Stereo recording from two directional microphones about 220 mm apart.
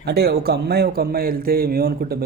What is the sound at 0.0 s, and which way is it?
Speech, 45° right (ahead or behind).